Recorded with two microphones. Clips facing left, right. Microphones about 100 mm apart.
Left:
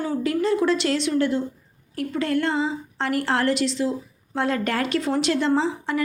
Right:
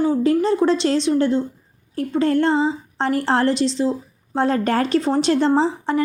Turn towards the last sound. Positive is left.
turn(degrees=-35)  # may be behind; listen again after turning